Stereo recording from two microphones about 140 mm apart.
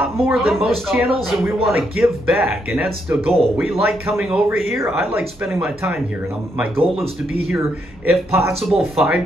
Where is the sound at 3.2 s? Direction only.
45° right (ahead or behind).